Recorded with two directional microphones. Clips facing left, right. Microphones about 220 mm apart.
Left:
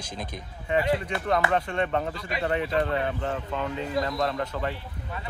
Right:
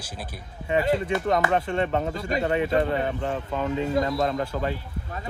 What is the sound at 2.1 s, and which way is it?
Speech, 45° right (ahead or behind).